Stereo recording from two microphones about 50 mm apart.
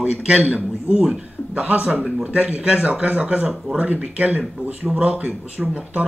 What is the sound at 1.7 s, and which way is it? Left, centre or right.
Speech, right.